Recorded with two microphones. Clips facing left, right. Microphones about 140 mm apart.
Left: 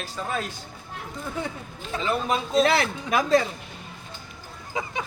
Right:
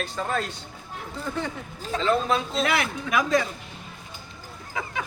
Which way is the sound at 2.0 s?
15° left (ahead or behind).